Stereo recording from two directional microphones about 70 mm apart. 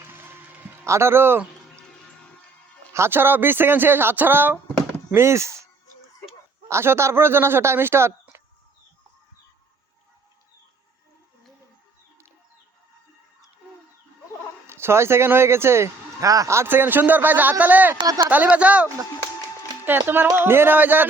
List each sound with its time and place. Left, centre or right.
0.0 s music: right
0.9 s speech: right
2.9 s speech: right
5.1 s speech: right
6.7 s speech: right
14.7 s speech: right
16.2 s a man's voice: right
16.6 s speech: right
18.0 s speech: right
18.3 s speech: right
19.8 s speech: right